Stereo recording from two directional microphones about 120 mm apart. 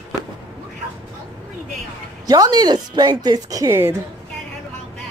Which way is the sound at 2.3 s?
35° right (ahead or behind).